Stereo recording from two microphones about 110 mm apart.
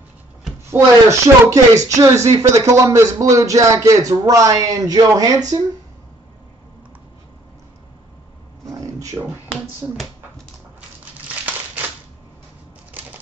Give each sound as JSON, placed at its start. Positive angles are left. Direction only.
{"t": 0.7, "sound": "speech", "side_deg": -25}
{"t": 9.2, "sound": "speech", "side_deg": -20}